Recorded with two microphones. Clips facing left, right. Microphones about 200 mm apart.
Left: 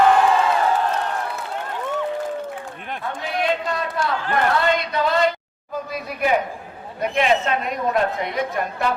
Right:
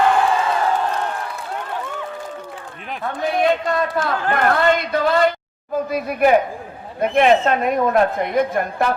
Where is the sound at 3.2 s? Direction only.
50° right (ahead or behind).